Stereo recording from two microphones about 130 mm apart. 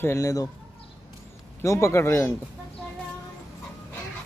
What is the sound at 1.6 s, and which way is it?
Speech, 20° left (ahead or behind).